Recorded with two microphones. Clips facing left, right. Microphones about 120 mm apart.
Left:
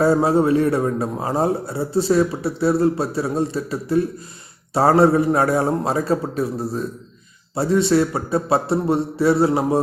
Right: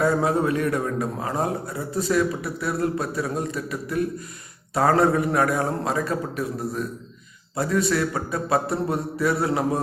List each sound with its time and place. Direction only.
0.0 s a man's voice: 30° left (ahead or behind)